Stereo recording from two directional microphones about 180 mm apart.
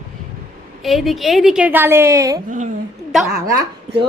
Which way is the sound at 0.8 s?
Centre (ahead or behind).